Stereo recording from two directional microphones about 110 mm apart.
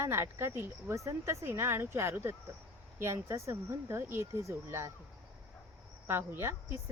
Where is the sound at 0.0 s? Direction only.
25° right (ahead or behind).